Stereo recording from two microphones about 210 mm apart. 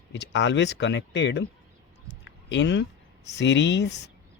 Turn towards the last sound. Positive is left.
turn(degrees=55)  # may be behind; listen again after turning